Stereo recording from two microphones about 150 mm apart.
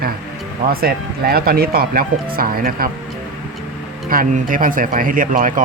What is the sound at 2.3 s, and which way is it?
Speech, 75° right (ahead or behind).